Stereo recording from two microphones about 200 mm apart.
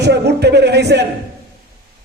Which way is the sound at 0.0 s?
55° right (ahead or behind).